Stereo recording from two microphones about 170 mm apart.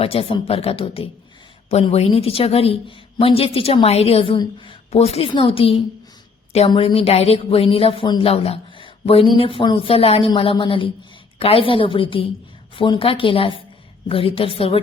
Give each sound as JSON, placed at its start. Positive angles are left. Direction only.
{"t": 0.0, "sound": "a woman's voice", "side_deg": 35}